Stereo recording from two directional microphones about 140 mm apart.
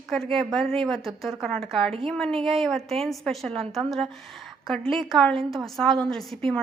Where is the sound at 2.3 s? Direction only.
40° right (ahead or behind).